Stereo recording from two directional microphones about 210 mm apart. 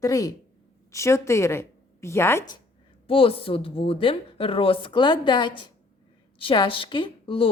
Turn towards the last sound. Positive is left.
turn(degrees=25)  # may be behind; listen again after turning